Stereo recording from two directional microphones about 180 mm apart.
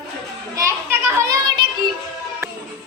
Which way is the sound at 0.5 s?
15° right (ahead or behind).